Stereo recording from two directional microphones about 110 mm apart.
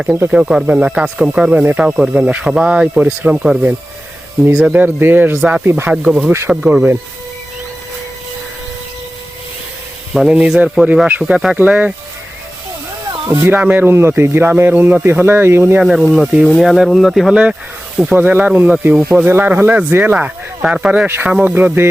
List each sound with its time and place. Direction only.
0.3 s speech: 10° right (ahead or behind)
5.4 s speech: 5° right (ahead or behind)
5.6 s speech: 20° right (ahead or behind)
10.2 s speech: 10° right (ahead or behind)
13.2 s speech: 20° right (ahead or behind)
15.8 s speech: 5° right (ahead or behind)